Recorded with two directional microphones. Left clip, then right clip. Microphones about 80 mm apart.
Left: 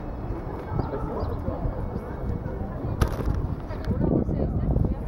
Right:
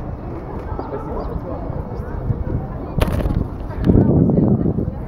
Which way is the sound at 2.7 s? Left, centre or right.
Right.